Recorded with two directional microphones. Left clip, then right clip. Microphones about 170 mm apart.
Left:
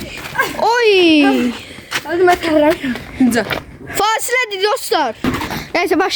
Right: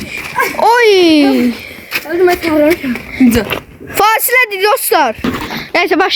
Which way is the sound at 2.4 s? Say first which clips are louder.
Right 2 dB; 50° right (ahead or behind).